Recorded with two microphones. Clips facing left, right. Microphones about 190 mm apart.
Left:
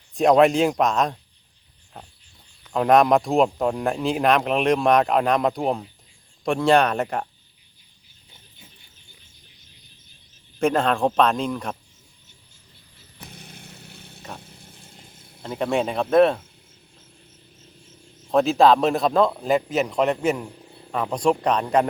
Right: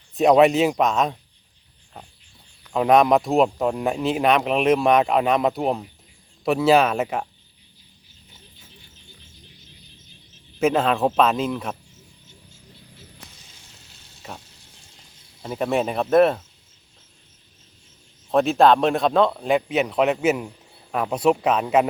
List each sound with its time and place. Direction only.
0.1 s speech: centre (ahead or behind)
2.6 s speech: centre (ahead or behind)
10.6 s speech: 5° right (ahead or behind)
13.2 s a sound: 60° left (ahead or behind)
14.3 s mechanisms: 55° left (ahead or behind)
15.4 s speech: 5° right (ahead or behind)
18.3 s a man's voice: centre (ahead or behind)